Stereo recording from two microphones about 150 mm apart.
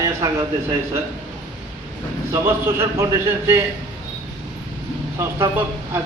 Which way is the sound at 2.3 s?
15° right (ahead or behind).